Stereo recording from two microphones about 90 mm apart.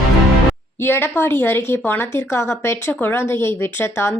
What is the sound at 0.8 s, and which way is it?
Speech, 25° left (ahead or behind).